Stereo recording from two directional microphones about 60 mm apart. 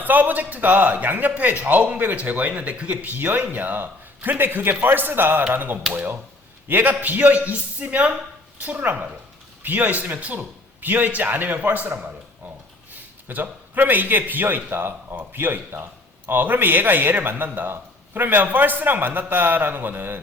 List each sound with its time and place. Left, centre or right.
0.0 s a man's voice: right